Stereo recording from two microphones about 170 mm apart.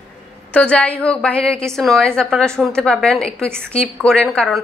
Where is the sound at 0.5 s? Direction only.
5° left (ahead or behind).